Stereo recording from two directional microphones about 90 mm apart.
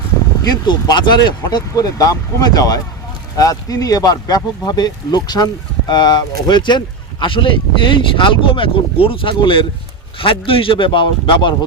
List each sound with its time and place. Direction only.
0.6 s speech: 55° left (ahead or behind)